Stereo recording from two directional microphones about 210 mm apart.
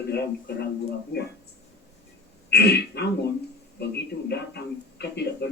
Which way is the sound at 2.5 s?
55° left (ahead or behind).